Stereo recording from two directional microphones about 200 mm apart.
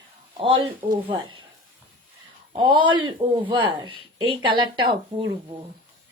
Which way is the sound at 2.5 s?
25° right (ahead or behind).